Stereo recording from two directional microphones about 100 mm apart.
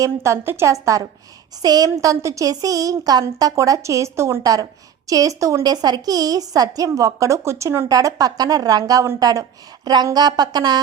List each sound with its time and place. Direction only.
0.0 s a woman's voice: 30° right (ahead or behind)
7.9 s speech: 40° right (ahead or behind)